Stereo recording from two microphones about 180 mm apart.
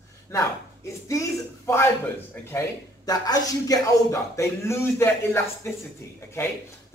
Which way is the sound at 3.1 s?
20° left (ahead or behind).